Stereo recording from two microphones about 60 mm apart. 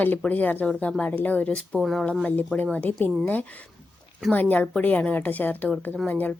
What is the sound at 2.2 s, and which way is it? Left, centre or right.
A woman's voice, left.